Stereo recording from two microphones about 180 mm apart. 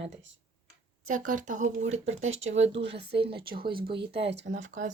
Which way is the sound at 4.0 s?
70° right (ahead or behind).